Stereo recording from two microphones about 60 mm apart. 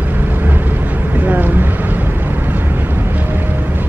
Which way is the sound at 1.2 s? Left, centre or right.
Right.